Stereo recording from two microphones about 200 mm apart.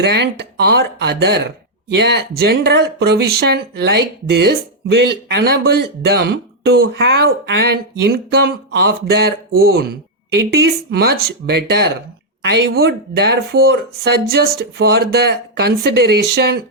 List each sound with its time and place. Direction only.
0.0 s speech: 55° right (ahead or behind)